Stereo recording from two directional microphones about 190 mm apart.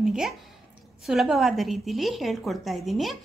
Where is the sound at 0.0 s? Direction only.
Centre (ahead or behind).